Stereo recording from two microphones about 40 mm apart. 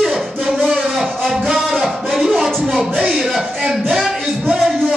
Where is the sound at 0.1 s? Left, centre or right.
Centre.